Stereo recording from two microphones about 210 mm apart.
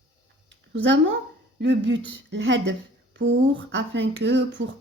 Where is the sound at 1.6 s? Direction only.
60° right (ahead or behind).